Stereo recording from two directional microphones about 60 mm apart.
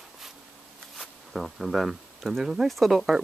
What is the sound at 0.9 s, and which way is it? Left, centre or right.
Speech, centre.